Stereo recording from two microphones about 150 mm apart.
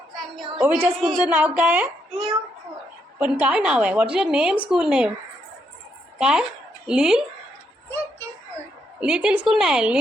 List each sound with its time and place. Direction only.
0.6 s a woman's voice: 15° right (ahead or behind)
6.1 s a woman's voice: 5° right (ahead or behind)
9.0 s a woman's voice: 5° right (ahead or behind)